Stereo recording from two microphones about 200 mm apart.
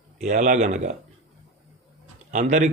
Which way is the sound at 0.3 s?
40° right (ahead or behind).